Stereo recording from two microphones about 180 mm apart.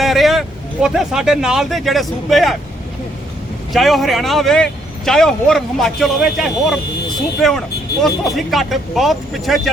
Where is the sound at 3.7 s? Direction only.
Centre (ahead or behind).